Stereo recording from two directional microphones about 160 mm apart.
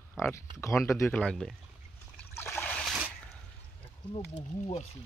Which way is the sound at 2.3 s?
15° left (ahead or behind).